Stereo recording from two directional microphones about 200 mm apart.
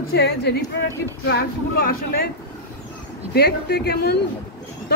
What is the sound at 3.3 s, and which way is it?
Speech, 55° left (ahead or behind).